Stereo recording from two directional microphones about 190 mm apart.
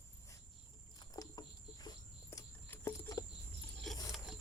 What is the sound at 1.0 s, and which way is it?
Cricket, 20° left (ahead or behind).